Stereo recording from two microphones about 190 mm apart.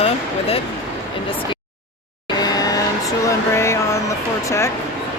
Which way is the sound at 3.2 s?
15° left (ahead or behind).